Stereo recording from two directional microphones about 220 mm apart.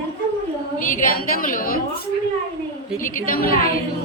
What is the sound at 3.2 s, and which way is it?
Speech, 40° left (ahead or behind).